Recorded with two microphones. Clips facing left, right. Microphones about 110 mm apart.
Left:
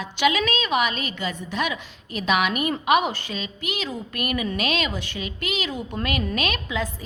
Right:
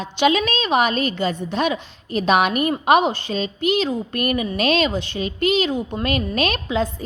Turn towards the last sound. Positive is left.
turn(degrees=-35)  # may be behind; listen again after turning